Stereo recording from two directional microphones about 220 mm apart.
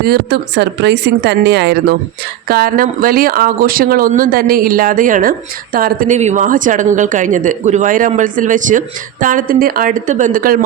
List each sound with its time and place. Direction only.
0.0 s speech: 45° right (ahead or behind)